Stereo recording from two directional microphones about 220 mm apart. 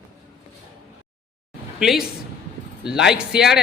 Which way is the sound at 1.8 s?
Centre (ahead or behind).